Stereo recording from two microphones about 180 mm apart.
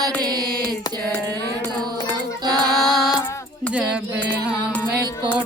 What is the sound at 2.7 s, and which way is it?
Music, centre (ahead or behind).